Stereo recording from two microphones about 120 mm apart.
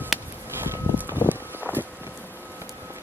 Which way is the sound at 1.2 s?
15° right (ahead or behind).